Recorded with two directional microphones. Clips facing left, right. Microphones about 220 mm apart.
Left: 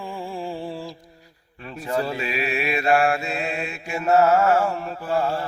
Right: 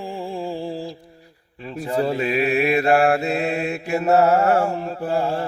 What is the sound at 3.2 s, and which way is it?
Mantra, 60° right (ahead or behind).